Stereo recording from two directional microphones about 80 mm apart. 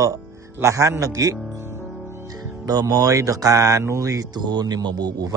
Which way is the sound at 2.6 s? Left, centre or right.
Right.